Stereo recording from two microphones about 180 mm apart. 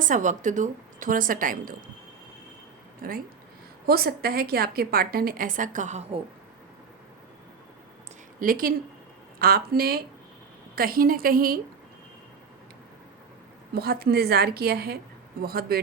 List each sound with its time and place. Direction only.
0.0 s a woman's voice: 45° right (ahead or behind)
3.0 s a woman's voice: 55° right (ahead or behind); by 6.2 s 35° right (ahead or behind)
8.4 s a woman's voice: 50° right (ahead or behind)
13.7 s a woman's voice: 60° right (ahead or behind)